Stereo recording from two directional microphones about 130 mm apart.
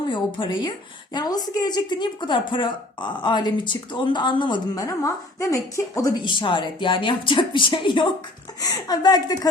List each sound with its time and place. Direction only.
0.1 s a woman's voice: 40° left (ahead or behind)